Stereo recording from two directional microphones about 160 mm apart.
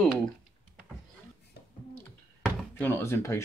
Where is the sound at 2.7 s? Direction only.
10° left (ahead or behind).